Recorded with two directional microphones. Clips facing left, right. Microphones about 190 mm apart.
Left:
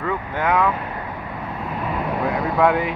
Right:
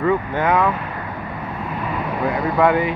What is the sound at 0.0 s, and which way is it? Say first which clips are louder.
Speech: right 5 dB; centre (ahead or behind).